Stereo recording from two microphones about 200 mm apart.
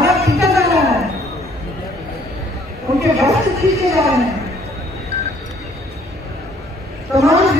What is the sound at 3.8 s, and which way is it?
Speech, 15° right (ahead or behind).